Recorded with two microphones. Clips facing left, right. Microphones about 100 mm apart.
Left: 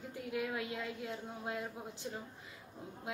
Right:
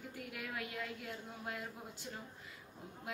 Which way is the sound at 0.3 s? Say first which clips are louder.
Left 8 dB; 20° left (ahead or behind).